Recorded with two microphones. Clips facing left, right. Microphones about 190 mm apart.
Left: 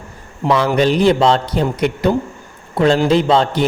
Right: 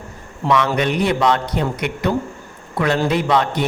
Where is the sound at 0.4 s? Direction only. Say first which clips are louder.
Left 4 dB; 30° left (ahead or behind).